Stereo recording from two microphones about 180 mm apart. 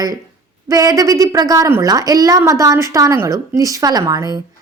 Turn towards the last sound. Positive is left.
turn(degrees=-20)  # may be behind; listen again after turning